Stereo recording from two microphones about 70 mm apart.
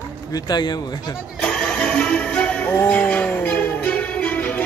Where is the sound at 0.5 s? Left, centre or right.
Left.